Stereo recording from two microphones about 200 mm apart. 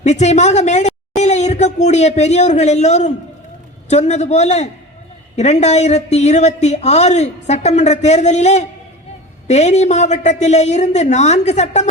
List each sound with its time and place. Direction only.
0.0 s a woman's voice: 35° left (ahead or behind)